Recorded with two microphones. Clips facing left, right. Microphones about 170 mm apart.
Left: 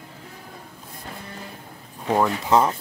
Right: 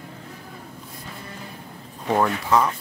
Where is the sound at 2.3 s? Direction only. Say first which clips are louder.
Left 2 dB; 25° left (ahead or behind).